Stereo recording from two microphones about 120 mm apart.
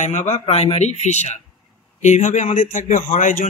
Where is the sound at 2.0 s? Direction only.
85° left.